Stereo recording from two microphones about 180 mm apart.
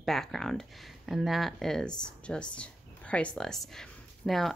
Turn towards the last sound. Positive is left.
turn(degrees=0)  # may be behind; listen again after turning